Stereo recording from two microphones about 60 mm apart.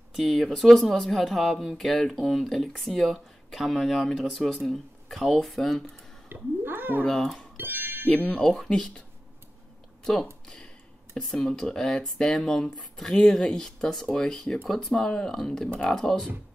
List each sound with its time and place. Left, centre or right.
0.1 s speech: centre
6.2 s a sound: right
7.1 s speech: centre
7.5 s music: right
8.1 s speech: left
8.4 s speech: centre
10.4 s a sound: centre
11.1 s speech: centre